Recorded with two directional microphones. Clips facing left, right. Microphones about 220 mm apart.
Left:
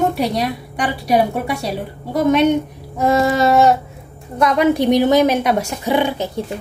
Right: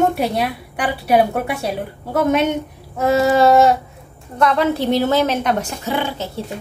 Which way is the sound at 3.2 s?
Centre (ahead or behind).